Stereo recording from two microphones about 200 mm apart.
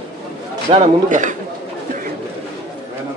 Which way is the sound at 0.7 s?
35° right (ahead or behind).